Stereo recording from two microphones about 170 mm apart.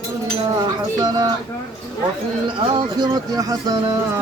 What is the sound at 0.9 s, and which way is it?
Speech, 20° right (ahead or behind).